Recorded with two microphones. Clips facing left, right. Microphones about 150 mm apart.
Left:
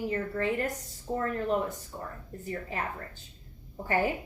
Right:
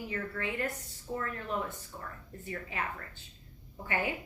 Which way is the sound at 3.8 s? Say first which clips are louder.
Left 6 dB; 40° left (ahead or behind).